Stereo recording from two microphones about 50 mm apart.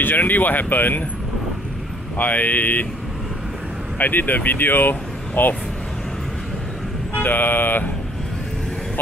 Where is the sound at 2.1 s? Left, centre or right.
Left.